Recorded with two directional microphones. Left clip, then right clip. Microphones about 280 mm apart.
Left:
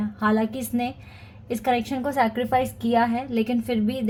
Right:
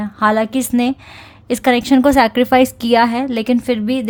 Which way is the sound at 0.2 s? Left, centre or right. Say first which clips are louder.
Right 10 dB; right.